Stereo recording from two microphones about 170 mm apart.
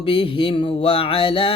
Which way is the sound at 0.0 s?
30° left (ahead or behind).